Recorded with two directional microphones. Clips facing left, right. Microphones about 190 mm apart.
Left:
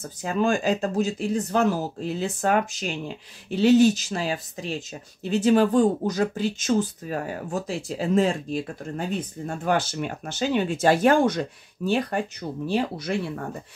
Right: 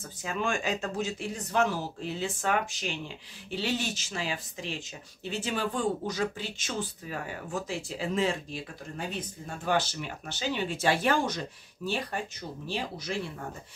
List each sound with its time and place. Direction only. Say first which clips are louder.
0.2 s speech: left 8 dB; 35° left (ahead or behind)
9.5 s speech: left 4 dB; 55° left (ahead or behind)